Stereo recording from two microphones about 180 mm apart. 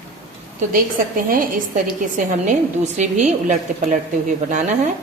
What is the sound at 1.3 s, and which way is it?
Speech, 50° right (ahead or behind).